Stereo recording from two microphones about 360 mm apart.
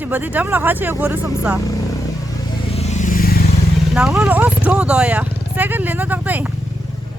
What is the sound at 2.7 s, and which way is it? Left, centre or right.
Vehicle, centre.